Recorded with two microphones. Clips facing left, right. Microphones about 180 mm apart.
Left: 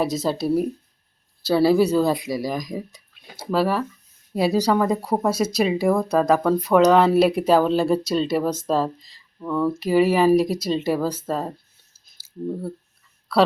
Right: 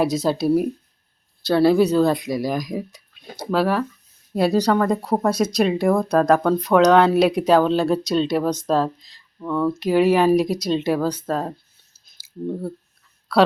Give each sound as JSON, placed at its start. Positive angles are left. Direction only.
{"t": 0.0, "sound": "speech", "side_deg": 0}
{"t": 13.3, "sound": "speech", "side_deg": 5}